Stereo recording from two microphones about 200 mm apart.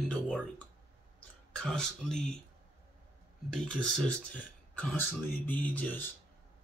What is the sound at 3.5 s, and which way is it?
Speech, 5° left (ahead or behind).